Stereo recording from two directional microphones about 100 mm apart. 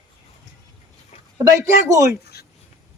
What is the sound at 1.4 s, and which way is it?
Speech, 30° right (ahead or behind).